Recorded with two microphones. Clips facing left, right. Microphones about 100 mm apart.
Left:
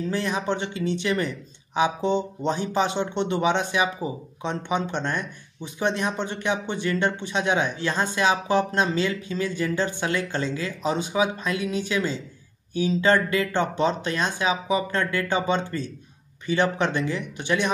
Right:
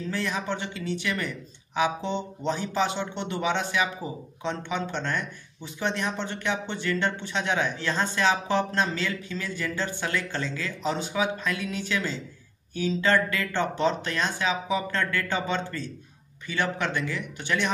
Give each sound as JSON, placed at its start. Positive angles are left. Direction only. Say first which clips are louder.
{"t": 0.1, "sound": "speech", "louder": "left 2 dB", "side_deg": 20}